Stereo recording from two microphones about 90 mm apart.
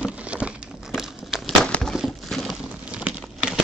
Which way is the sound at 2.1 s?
5° left (ahead or behind).